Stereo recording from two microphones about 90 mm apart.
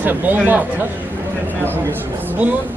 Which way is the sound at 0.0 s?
20° right (ahead or behind).